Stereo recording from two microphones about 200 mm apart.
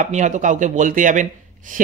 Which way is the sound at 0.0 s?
35° right (ahead or behind).